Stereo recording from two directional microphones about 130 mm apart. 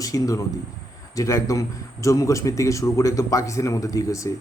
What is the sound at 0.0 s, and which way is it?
A man's voice, 25° left (ahead or behind).